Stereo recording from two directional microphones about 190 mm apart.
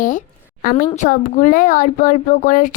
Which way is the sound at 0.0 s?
45° left (ahead or behind).